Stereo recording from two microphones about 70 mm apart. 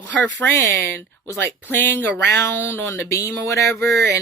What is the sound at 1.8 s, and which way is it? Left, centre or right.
Speech, left.